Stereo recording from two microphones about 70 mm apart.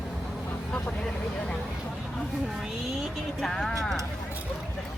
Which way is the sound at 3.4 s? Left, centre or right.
Centre.